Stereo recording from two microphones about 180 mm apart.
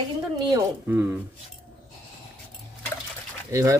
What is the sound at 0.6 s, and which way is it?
Speech, 10° right (ahead or behind).